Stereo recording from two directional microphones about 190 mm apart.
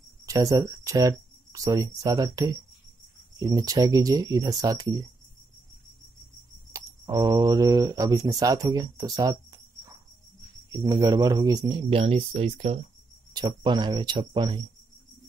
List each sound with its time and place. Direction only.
0.3 s speech: 15° right (ahead or behind)
6.7 s speech: 20° right (ahead or behind)
13.3 s speech: 20° right (ahead or behind)